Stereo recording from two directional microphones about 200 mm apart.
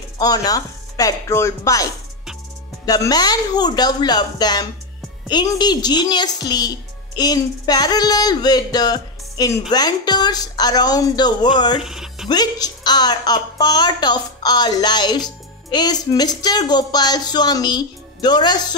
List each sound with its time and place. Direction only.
0.2 s speech: 20° left (ahead or behind)
11.8 s music: centre (ahead or behind)
12.3 s speech: 20° left (ahead or behind)